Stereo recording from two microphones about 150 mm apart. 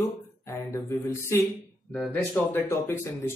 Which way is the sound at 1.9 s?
10° left (ahead or behind).